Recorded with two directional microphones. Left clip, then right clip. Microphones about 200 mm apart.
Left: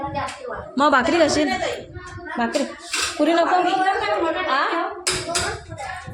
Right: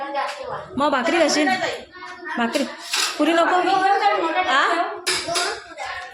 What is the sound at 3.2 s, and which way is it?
Speech, 10° right (ahead or behind).